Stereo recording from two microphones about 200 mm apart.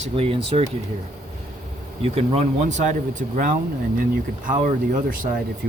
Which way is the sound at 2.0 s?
30° right (ahead or behind).